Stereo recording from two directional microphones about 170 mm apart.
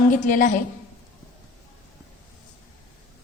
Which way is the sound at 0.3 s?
50° left (ahead or behind).